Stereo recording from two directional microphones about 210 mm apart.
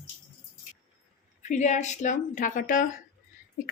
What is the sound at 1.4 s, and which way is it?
A woman's voice, 35° left (ahead or behind).